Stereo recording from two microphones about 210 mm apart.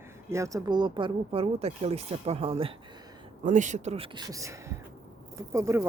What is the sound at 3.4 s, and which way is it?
Speech, 35° right (ahead or behind).